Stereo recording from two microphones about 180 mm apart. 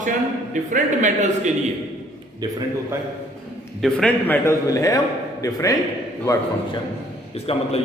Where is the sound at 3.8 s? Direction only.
5° left (ahead or behind).